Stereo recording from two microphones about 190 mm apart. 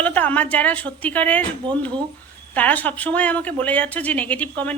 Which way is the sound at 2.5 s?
10° left (ahead or behind).